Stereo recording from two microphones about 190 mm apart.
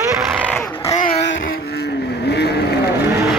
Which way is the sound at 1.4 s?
60° left (ahead or behind).